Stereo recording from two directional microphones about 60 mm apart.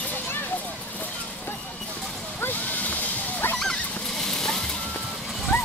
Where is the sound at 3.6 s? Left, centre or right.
Centre.